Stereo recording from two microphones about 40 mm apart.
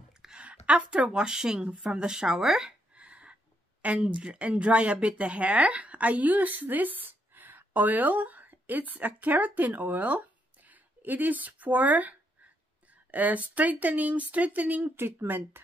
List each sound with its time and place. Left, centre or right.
0.4 s speech: right; by 2.7 s centre
2.9 s a sound: right
4.1 s speech: right
15.0 s speech: right